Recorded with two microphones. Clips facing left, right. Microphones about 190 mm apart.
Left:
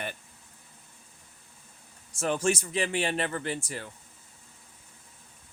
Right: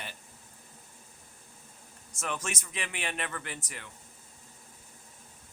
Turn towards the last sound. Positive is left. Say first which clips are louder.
# left 9 dB
turn(degrees=35)  # may be behind; listen again after turning